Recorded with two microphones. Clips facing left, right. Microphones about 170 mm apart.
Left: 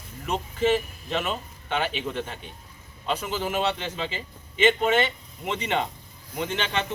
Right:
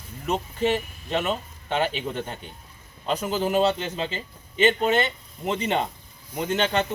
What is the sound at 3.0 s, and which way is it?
Speech, 35° right (ahead or behind).